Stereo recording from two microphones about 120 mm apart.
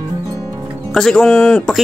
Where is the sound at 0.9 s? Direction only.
5° left (ahead or behind).